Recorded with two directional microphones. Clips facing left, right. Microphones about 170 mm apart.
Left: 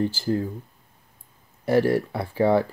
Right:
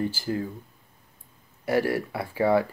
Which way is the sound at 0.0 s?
5° right (ahead or behind).